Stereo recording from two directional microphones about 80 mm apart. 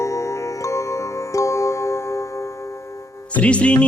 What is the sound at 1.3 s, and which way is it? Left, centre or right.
Music, left.